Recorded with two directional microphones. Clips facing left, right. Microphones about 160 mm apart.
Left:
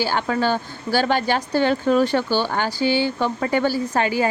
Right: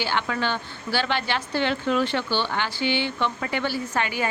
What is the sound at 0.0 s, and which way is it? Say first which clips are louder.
A woman's voice: left 5 dB; 40° left (ahead or behind).